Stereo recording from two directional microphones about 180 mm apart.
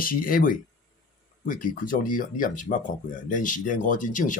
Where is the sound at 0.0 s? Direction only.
50° left (ahead or behind).